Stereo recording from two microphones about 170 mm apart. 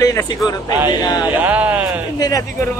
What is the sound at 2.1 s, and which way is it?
Speech, 20° left (ahead or behind).